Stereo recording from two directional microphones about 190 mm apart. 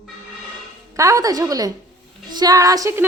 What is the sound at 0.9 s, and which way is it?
A man's voice, 15° right (ahead or behind).